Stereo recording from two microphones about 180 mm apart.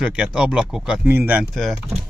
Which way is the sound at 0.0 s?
5° right (ahead or behind).